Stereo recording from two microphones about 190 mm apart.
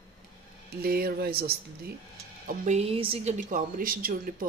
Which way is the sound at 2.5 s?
35° right (ahead or behind).